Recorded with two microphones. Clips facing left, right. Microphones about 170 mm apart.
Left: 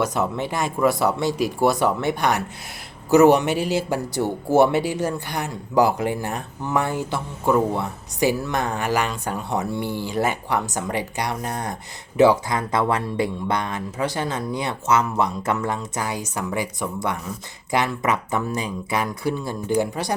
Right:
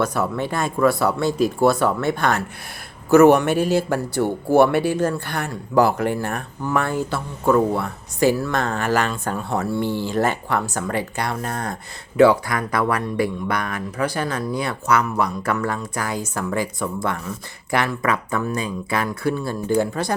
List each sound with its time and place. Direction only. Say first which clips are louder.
0.0 s speech: right 1 dB; 20° left (ahead or behind)
3.8 s speech: right 2 dB; 15° left (ahead or behind)